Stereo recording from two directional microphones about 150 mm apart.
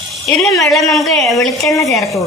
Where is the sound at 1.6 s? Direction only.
20° left (ahead or behind).